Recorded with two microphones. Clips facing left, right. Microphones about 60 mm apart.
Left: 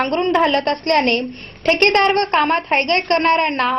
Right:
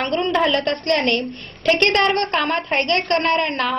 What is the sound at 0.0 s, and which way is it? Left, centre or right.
A woman's voice, left.